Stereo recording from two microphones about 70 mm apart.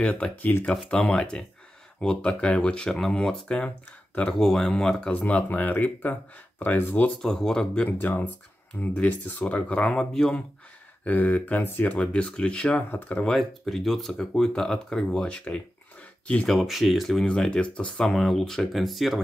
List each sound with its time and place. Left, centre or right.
0.0 s speech: centre
5.1 s speech: left
7.2 s speech: centre
11.1 s speech: left
13.2 s speech: centre
16.4 s speech: centre
17.3 s speech: centre